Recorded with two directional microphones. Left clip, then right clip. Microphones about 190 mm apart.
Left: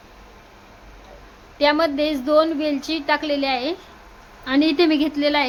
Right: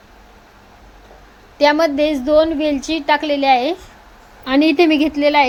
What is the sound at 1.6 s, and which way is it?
A woman's voice, 10° right (ahead or behind).